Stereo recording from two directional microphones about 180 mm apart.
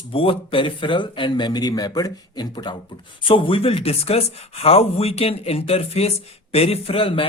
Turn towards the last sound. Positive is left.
turn(degrees=30)  # may be behind; listen again after turning